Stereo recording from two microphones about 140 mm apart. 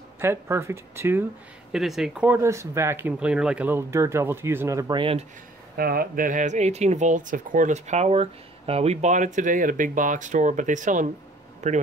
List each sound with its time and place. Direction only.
0.2 s speech: 15° right (ahead or behind)
1.7 s speech: centre (ahead or behind); by 4.9 s 20° right (ahead or behind)
4.9 s speech: 40° right (ahead or behind)
5.8 s speech: 90° right; by 11.8 s 55° right (ahead or behind)